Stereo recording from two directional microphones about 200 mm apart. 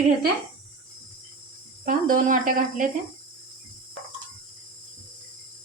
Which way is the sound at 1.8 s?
40° right (ahead or behind).